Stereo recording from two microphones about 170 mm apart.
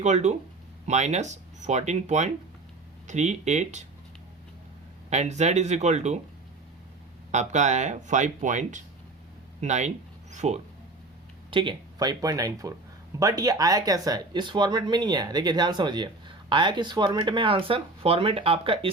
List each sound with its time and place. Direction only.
0.0 s speech: 40° right (ahead or behind)
5.1 s speech: 40° right (ahead or behind)
7.3 s speech: 45° right (ahead or behind)
11.5 s speech: 25° right (ahead or behind)